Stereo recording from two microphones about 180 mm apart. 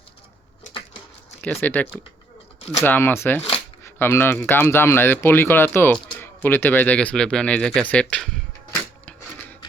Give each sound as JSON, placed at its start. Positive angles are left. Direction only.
{"t": 1.6, "sound": "speech", "side_deg": 10}